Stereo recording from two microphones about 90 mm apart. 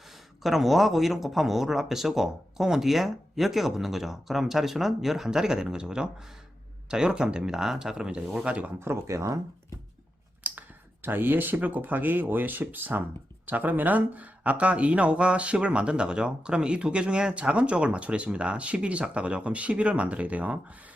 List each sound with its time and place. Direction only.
0.4 s speech: centre (ahead or behind)
8.8 s speech: 30° right (ahead or behind)
10.4 s clicking: 20° right (ahead or behind)
11.0 s speech: 20° right (ahead or behind)